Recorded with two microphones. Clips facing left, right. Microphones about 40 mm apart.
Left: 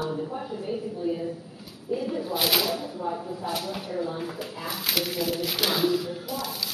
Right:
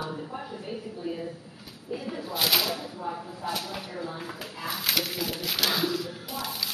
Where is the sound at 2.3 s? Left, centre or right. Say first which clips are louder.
Even; centre.